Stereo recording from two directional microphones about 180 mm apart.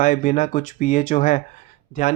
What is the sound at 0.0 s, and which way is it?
Speech, 45° left (ahead or behind).